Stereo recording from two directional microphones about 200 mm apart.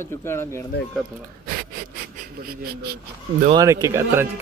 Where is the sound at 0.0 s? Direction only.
10° left (ahead or behind).